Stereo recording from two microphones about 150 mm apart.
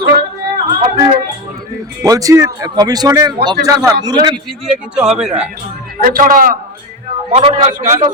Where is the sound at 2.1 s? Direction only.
20° right (ahead or behind).